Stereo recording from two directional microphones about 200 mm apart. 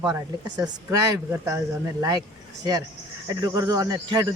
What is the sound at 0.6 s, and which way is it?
Speech, 15° right (ahead or behind).